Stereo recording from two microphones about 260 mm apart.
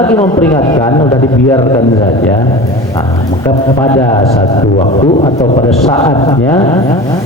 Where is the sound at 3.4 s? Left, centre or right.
Centre.